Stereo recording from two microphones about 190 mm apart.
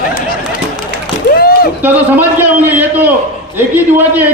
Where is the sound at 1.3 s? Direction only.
50° left (ahead or behind).